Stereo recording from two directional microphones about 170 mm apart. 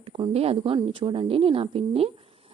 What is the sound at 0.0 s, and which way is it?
A woman's voice, 35° right (ahead or behind).